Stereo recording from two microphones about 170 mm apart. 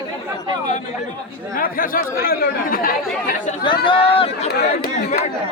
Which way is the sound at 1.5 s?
55° left (ahead or behind).